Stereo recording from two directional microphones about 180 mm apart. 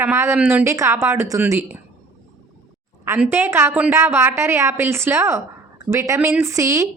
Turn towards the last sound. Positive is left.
turn(degrees=-15)  # may be behind; listen again after turning